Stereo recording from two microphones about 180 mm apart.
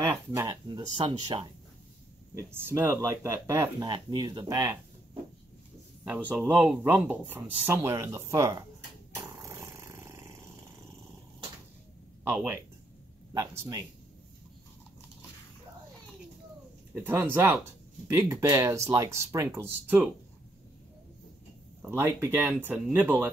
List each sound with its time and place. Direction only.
0.1 s speech: 15° right (ahead or behind)
0.7 s speech: 25° right (ahead or behind)
2.3 s speech: 15° right (ahead or behind)
3.9 s speech: 25° right (ahead or behind)
6.0 s speech: 10° right (ahead or behind)
9.2 s a sound: 15° right (ahead or behind)
12.3 s speech: 10° right (ahead or behind)
16.9 s speech: 10° right (ahead or behind)
21.8 s speech: 15° right (ahead or behind)